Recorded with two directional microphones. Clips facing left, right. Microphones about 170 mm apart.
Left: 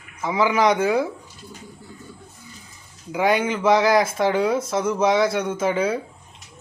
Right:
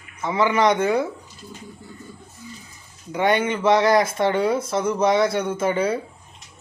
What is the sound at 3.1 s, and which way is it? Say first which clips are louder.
Speech: even; 5° left (ahead or behind).